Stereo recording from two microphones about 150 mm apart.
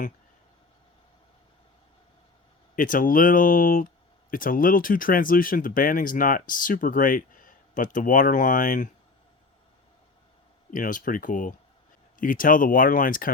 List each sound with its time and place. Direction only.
2.7 s speech: 65° left (ahead or behind)
10.7 s speech: 65° left (ahead or behind)